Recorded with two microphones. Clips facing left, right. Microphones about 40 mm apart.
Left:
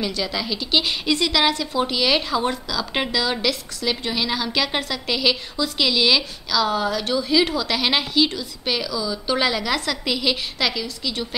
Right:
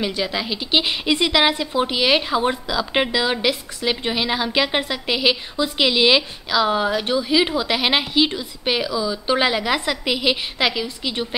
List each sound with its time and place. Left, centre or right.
0.0 s a woman's voice: right